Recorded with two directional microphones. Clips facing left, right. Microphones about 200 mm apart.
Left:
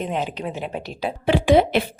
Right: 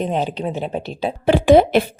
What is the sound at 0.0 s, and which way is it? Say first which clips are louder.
A woman's voice: right 4 dB; 35° right (ahead or behind).